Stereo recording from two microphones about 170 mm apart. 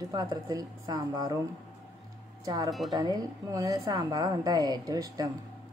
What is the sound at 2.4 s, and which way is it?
A woman's voice, 20° right (ahead or behind).